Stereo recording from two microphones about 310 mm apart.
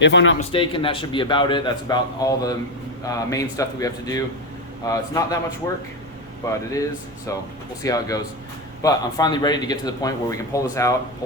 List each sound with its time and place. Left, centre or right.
0.0 s speech: left
0.3 s a man's voice: centre
7.8 s a man's voice: centre